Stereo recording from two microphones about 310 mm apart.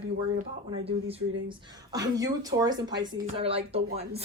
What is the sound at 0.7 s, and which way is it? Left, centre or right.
A woman's voice, centre.